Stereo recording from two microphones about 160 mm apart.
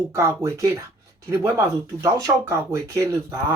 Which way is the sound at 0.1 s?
15° right (ahead or behind).